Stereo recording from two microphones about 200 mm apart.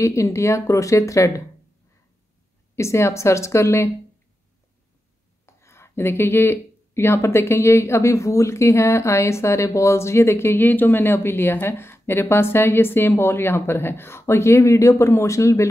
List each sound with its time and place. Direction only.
0.0 s speech: 15° left (ahead or behind)
2.7 s speech: 15° left (ahead or behind)
5.6 s speech: 15° left (ahead or behind)